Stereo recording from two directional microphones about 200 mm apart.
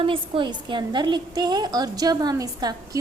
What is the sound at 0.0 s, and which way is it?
A woman's voice, 25° right (ahead or behind).